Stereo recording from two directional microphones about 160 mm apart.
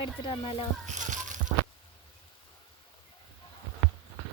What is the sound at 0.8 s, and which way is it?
Music, 50° right (ahead or behind).